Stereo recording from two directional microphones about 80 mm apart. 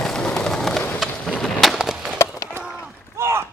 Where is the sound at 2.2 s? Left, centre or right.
Left.